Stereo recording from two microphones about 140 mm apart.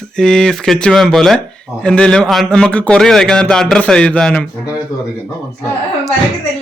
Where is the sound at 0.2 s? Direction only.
5° left (ahead or behind).